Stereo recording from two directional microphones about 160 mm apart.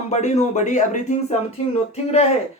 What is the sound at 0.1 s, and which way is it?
A man's voice, 45° left (ahead or behind).